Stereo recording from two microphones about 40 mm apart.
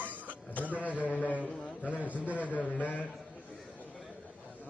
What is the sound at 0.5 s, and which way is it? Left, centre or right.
A man's voice, left.